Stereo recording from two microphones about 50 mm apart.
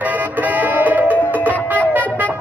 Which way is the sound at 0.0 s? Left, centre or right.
Right.